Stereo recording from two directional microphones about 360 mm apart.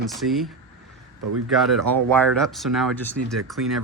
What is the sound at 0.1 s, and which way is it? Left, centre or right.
Speech, centre.